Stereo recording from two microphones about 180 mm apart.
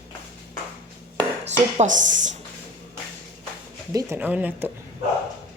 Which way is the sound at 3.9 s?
20° right (ahead or behind).